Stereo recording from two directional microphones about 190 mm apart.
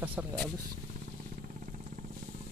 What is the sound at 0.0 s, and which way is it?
Vehicle, 10° right (ahead or behind).